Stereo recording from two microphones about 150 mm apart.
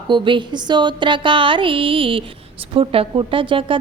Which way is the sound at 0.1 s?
30° right (ahead or behind).